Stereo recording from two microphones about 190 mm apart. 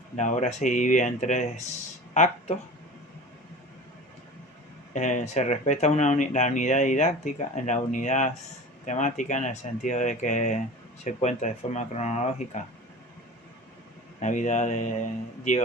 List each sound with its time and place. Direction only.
0.2 s speech: 40° left (ahead or behind)
4.9 s speech: 40° left (ahead or behind)
14.2 s speech: 40° left (ahead or behind)